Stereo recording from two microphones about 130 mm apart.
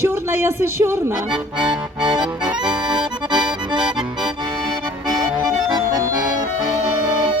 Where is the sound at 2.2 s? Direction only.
5° right (ahead or behind).